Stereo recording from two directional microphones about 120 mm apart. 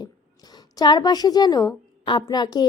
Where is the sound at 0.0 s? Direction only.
35° left (ahead or behind).